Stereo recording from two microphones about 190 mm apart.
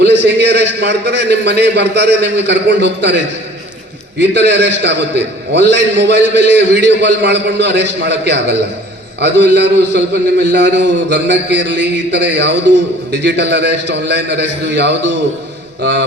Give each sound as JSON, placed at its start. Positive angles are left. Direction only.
{"t": 0.0, "sound": "a man's voice", "side_deg": -65}
{"t": 4.2, "sound": "a man's voice", "side_deg": -65}